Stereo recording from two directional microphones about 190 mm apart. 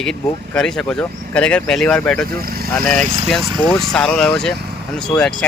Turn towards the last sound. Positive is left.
turn(degrees=5)  # may be behind; listen again after turning